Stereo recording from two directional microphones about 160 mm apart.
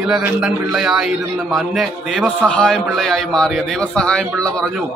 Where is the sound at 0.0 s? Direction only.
5° right (ahead or behind).